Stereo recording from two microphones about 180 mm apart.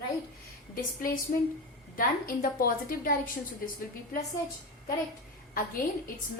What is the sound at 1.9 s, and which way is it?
A woman's voice, 50° left (ahead or behind).